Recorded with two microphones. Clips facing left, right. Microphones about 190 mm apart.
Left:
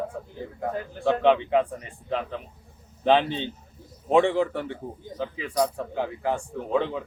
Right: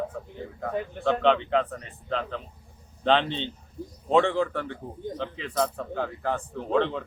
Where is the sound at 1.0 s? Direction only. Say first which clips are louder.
Left 2 dB; 10° left (ahead or behind).